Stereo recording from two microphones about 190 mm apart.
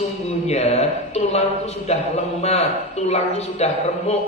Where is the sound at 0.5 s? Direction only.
35° left (ahead or behind).